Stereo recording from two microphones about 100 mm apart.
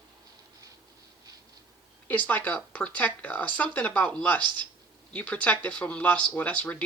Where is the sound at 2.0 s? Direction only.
15° left (ahead or behind).